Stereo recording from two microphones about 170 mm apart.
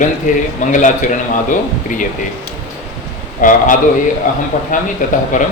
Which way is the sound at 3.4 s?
50° left (ahead or behind).